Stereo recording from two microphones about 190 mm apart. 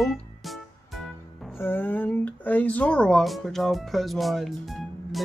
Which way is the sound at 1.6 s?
10° left (ahead or behind).